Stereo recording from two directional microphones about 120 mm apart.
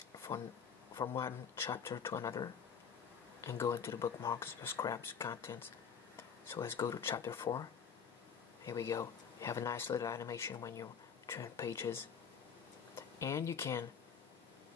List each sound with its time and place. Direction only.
1.1 s speech: 20° left (ahead or behind)
8.6 s speech: 25° left (ahead or behind)